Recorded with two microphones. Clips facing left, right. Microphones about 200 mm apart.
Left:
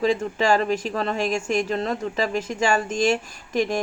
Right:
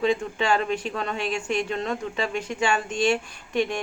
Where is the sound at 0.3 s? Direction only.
40° left (ahead or behind).